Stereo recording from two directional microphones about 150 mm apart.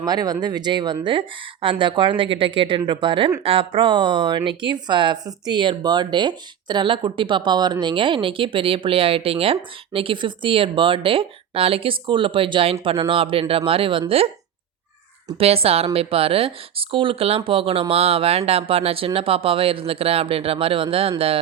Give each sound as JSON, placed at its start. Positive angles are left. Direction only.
{"t": 0.0, "sound": "speech", "side_deg": -25}
{"t": 15.4, "sound": "speech", "side_deg": -40}